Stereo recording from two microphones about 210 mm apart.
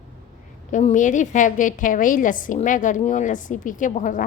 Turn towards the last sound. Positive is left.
turn(degrees=35)  # may be behind; listen again after turning